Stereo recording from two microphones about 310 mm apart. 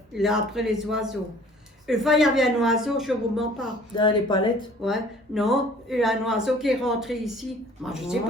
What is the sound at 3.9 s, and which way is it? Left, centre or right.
Speech, centre.